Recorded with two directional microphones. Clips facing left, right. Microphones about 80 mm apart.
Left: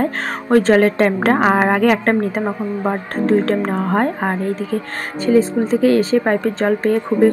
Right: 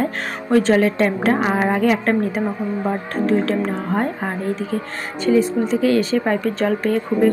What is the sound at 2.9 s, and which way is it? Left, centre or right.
A woman's voice, left.